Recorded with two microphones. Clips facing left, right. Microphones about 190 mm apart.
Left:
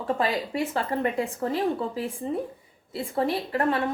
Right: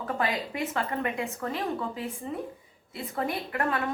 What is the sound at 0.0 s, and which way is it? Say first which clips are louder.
A woman's voice: left 4 dB; 30° left (ahead or behind).